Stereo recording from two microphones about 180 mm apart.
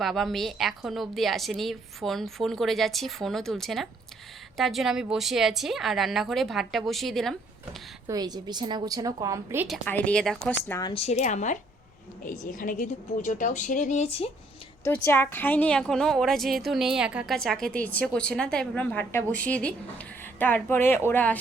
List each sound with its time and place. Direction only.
0.0 s a woman's voice: centre (ahead or behind)
8.0 s a woman's voice: 20° right (ahead or behind)
9.6 s speech: 5° left (ahead or behind)
10.8 s a woman's voice: 35° left (ahead or behind)
14.8 s a woman's voice: 10° left (ahead or behind)